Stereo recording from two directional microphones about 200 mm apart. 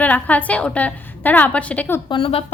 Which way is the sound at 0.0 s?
10° left (ahead or behind).